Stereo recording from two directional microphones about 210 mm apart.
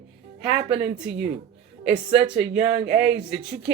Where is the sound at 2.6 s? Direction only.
50° right (ahead or behind).